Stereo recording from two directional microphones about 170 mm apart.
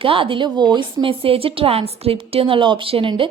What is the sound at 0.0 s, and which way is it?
A woman's voice, 30° right (ahead or behind).